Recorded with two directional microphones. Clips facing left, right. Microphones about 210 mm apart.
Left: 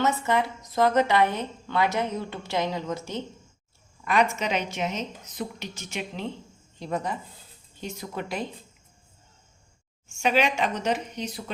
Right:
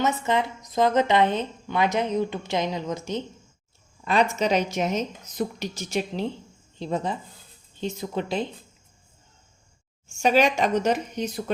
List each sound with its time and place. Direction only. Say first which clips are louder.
0.0 s a woman's voice: right 1 dB; 20° right (ahead or behind)
4.0 s speech: right 2 dB; 30° right (ahead or behind)
6.7 s a woman's voice: right 2 dB; 25° right (ahead or behind)
10.2 s speech: right 4 dB; 40° right (ahead or behind)